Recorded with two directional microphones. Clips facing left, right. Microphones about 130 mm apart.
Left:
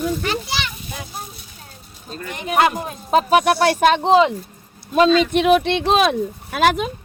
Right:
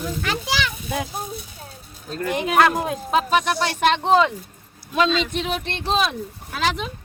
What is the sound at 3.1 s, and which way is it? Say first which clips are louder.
Speech: left 5 dB; 50° left (ahead or behind).